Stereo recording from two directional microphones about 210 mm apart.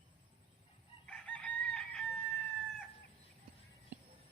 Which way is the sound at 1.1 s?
5° left (ahead or behind).